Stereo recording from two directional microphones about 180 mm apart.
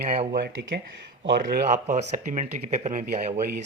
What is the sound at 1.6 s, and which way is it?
A man's voice, 40° right (ahead or behind).